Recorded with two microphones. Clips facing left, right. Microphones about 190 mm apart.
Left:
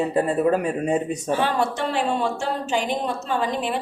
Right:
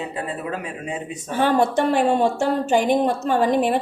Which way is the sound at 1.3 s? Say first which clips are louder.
Right 5 dB; 50° right (ahead or behind).